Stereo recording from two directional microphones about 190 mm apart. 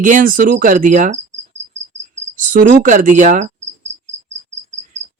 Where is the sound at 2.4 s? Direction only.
45° right (ahead or behind).